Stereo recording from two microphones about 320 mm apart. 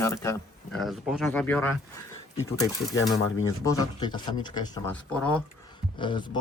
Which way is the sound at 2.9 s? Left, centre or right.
Left.